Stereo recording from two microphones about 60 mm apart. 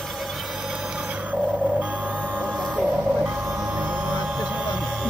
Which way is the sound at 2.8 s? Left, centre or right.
Right.